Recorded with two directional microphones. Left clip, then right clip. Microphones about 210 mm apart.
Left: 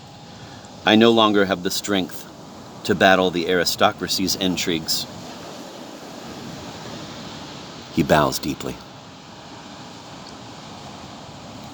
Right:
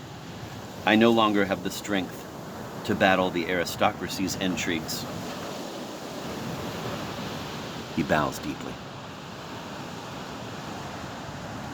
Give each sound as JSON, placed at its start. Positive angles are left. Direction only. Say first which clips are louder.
{"t": 0.9, "sound": "speech", "louder": "left 6 dB", "side_deg": 55}
{"t": 7.9, "sound": "speech", "louder": "left 8 dB", "side_deg": 50}